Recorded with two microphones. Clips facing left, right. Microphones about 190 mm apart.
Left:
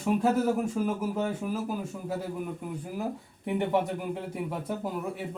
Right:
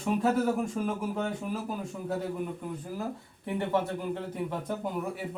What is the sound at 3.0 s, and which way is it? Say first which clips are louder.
Speech: left 2 dB; 15° left (ahead or behind).